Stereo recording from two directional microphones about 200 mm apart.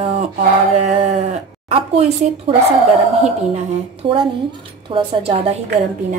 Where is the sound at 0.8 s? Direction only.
30° right (ahead or behind).